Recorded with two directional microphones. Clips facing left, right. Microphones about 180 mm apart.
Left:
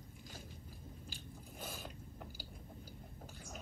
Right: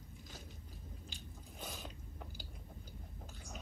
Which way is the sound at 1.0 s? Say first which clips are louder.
Left 2 dB; 5° left (ahead or behind).